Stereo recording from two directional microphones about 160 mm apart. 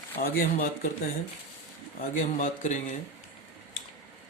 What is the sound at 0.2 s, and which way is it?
Speech, 70° left (ahead or behind).